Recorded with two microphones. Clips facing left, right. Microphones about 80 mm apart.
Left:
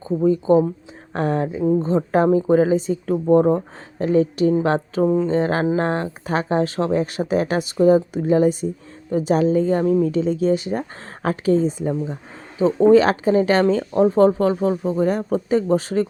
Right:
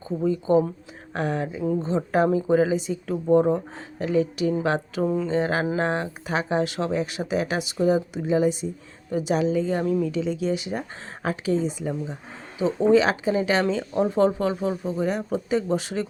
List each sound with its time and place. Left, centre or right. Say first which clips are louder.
0.0 s a woman's voice: left 6 dB; left
5.0 s speech: left 6 dB; left
5.3 s a woman's voice: left 4 dB; left